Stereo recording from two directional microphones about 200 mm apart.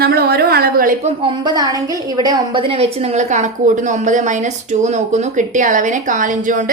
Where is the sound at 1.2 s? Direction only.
25° right (ahead or behind).